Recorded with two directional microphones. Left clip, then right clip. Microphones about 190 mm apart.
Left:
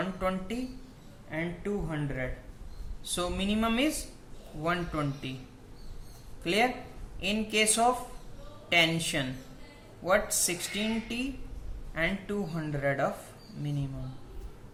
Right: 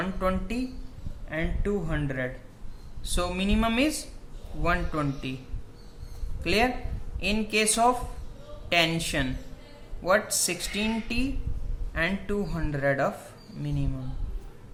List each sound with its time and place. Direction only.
0.0 s a woman's voice: 20° right (ahead or behind)
1.3 s a woman's voice: 30° right (ahead or behind)
6.4 s a woman's voice: 20° right (ahead or behind)